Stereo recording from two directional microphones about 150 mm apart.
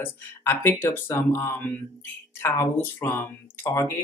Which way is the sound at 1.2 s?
15° left (ahead or behind).